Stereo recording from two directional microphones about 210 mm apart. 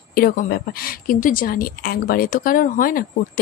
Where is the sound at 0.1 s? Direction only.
45° left (ahead or behind).